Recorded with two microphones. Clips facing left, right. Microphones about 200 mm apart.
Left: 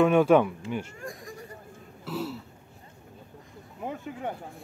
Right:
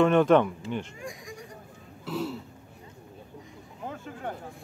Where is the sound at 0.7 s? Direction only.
5° left (ahead or behind).